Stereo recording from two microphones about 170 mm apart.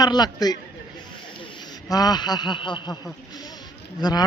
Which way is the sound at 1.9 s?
25° left (ahead or behind).